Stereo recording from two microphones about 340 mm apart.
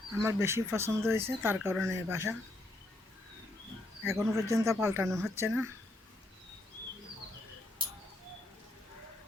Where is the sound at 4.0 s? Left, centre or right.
Centre.